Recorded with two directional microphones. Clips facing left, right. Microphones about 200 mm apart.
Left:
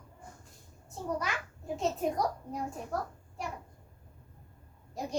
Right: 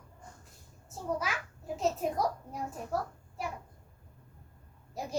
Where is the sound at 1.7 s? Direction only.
Centre (ahead or behind).